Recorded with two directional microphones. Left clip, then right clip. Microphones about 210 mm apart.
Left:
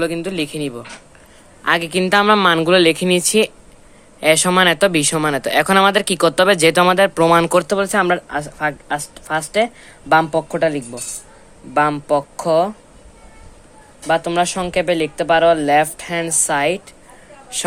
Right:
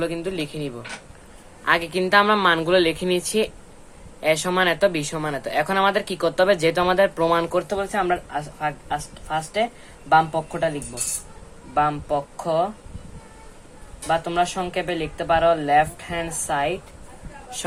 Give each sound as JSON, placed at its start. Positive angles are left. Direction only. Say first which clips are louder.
{"t": 0.0, "sound": "speech", "louder": "left 5 dB", "side_deg": 35}
{"t": 7.6, "sound": "speech", "louder": "left 7 dB", "side_deg": 55}
{"t": 14.1, "sound": "speech", "louder": "left 5 dB", "side_deg": 50}
{"t": 17.5, "sound": "speech", "louder": "left 7 dB", "side_deg": 35}